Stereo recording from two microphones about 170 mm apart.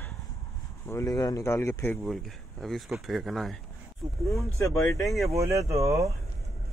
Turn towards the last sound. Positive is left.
turn(degrees=-20)  # may be behind; listen again after turning